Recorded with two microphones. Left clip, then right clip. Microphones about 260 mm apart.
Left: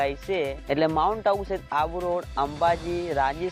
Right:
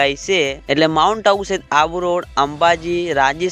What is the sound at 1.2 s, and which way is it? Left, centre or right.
Speech, right.